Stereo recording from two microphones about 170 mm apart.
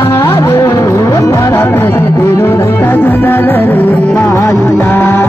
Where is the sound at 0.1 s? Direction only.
15° left (ahead or behind).